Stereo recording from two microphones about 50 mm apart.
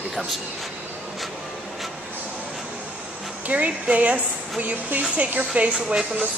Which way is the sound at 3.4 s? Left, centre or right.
Right.